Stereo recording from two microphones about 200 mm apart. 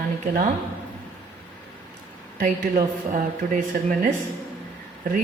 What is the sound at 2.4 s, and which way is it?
Speech, 45° right (ahead or behind).